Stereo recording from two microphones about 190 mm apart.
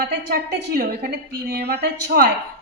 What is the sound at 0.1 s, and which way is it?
A woman's voice, 60° right (ahead or behind).